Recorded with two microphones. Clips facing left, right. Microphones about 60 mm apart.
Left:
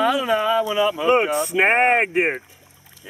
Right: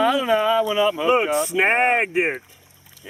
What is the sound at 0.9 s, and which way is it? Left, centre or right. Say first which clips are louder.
Speech: left 1 dB; centre.